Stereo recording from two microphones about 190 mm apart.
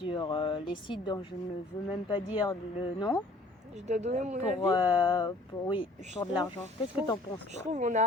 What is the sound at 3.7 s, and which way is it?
Speech, 35° right (ahead or behind).